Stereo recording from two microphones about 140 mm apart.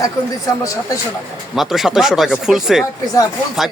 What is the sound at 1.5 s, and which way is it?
Speech, centre (ahead or behind).